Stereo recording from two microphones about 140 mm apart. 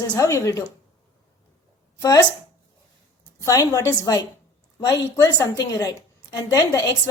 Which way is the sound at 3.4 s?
25° left (ahead or behind).